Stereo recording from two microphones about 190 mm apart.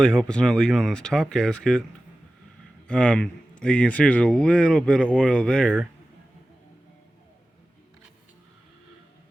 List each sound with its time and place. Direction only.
0.0 s a man's voice: 5° left (ahead or behind)
2.8 s a man's voice: 5° left (ahead or behind)